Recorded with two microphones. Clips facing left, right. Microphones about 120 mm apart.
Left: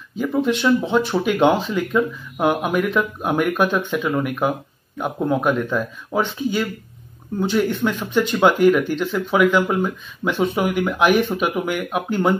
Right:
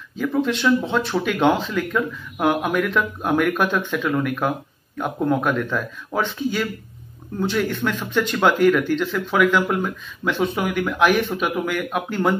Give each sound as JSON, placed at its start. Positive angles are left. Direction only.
{"t": 0.4, "sound": "speech", "side_deg": 5}